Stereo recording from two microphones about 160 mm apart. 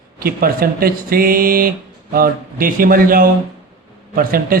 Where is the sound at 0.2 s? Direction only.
70° right (ahead or behind).